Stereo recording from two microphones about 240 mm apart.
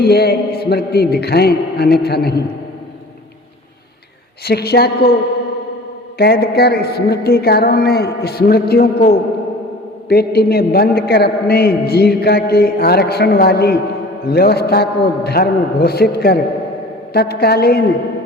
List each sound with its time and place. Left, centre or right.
0.0 s a man's voice: left
4.4 s a man's voice: left
6.1 s a man's voice: left